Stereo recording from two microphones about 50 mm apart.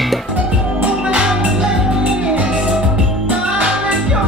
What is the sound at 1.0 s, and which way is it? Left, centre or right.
Music, centre.